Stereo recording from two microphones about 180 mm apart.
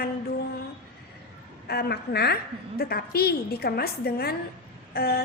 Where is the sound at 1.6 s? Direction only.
65° left (ahead or behind).